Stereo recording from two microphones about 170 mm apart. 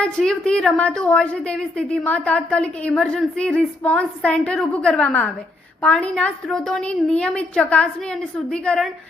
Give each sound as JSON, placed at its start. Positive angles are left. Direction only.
{"t": 0.0, "sound": "a woman's voice", "side_deg": 5}